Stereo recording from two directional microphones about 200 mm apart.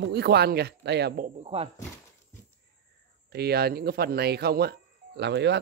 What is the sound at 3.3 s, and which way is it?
Speech, 50° right (ahead or behind).